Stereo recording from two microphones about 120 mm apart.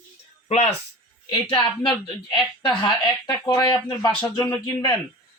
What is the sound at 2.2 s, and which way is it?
Speech, 40° left (ahead or behind).